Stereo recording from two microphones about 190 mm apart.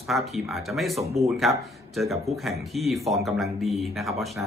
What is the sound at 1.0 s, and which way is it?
Speech, 35° right (ahead or behind).